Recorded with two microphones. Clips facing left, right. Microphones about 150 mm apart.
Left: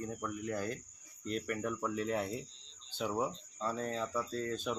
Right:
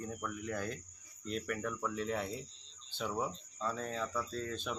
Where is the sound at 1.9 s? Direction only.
5° left (ahead or behind).